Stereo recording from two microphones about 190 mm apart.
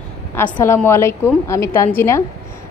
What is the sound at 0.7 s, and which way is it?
A woman's voice, 10° left (ahead or behind).